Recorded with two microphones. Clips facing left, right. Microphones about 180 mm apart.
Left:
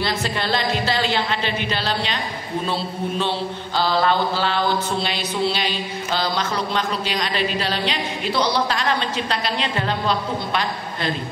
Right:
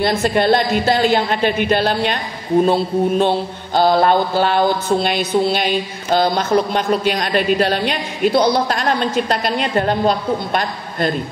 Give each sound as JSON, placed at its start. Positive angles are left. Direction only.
{"t": 0.0, "sound": "mantra", "side_deg": -50}